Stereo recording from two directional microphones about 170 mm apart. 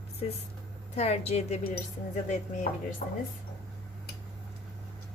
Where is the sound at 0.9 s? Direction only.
40° left (ahead or behind).